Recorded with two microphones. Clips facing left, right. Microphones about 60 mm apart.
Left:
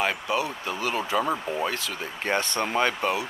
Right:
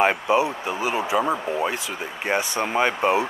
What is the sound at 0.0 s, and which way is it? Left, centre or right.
Speech, right.